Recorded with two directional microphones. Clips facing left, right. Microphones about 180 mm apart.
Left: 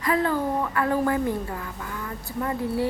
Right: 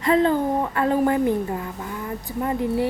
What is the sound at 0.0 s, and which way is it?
A woman's voice, 25° right (ahead or behind).